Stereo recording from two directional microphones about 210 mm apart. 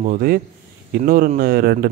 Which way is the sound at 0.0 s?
40° right (ahead or behind).